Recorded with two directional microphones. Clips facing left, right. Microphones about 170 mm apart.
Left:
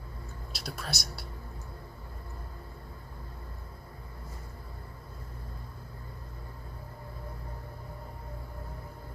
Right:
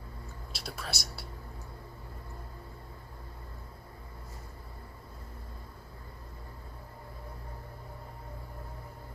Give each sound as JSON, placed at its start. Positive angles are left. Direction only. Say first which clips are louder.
{"t": 0.6, "sound": "speech", "louder": "left 2 dB", "side_deg": -5}